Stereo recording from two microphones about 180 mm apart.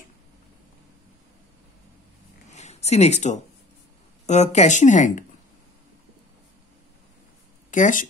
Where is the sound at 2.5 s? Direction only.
40° left (ahead or behind).